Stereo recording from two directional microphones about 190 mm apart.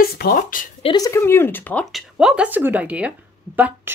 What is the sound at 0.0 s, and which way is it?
Speech, 55° left (ahead or behind).